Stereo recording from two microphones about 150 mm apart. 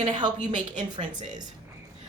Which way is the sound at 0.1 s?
30° right (ahead or behind).